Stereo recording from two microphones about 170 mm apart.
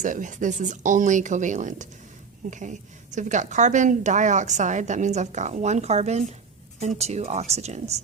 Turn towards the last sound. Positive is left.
turn(degrees=-40)  # may be behind; listen again after turning